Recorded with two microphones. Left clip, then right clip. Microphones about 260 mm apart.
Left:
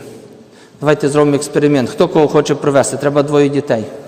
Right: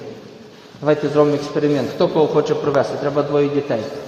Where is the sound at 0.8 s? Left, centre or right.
Left.